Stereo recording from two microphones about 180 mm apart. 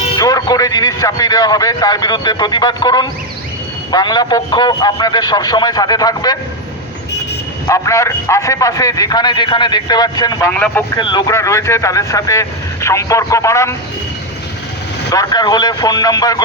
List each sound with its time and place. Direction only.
0.2 s a man's voice: 20° left (ahead or behind)
7.7 s a man's voice: 15° left (ahead or behind)
10.5 s speech: 10° left (ahead or behind)
10.9 s speech: 25° left (ahead or behind)
15.1 s a man's voice: 20° left (ahead or behind)